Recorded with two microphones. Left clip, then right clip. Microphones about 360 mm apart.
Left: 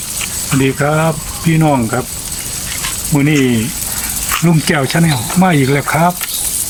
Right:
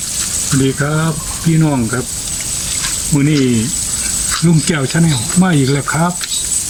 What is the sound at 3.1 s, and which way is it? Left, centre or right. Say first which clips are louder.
Speech: left 2 dB; centre.